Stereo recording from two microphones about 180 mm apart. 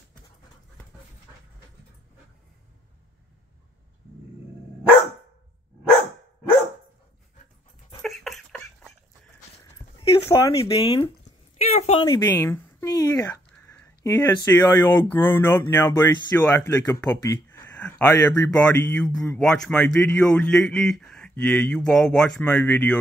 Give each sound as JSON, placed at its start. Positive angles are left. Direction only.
{"t": 8.0, "sound": "a sound", "side_deg": 0}
{"t": 10.2, "sound": "speech", "side_deg": 15}
{"t": 10.6, "sound": "speech", "side_deg": 30}
{"t": 11.5, "sound": "a sound", "side_deg": 40}
{"t": 12.0, "sound": "speech", "side_deg": 20}
{"t": 19.0, "sound": "speech", "side_deg": 20}
{"t": 19.3, "sound": "speech", "side_deg": 5}